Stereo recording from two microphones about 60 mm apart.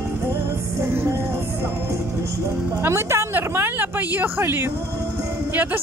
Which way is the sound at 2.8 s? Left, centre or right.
Right.